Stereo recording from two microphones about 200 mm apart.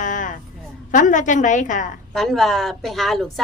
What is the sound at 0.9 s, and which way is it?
A woman's voice, 40° left (ahead or behind).